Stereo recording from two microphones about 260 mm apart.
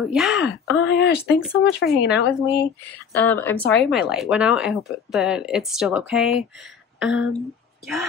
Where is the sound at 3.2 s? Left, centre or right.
Centre.